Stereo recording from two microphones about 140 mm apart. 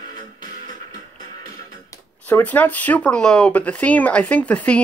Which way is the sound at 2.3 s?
10° left (ahead or behind).